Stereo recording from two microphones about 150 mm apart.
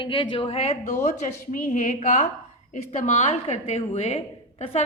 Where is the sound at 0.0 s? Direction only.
35° left (ahead or behind).